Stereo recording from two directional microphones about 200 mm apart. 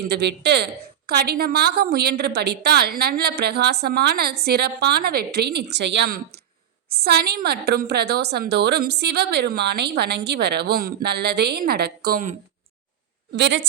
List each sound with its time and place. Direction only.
0.1 s a woman's voice: 55° right (ahead or behind)
13.3 s a woman's voice: 60° right (ahead or behind)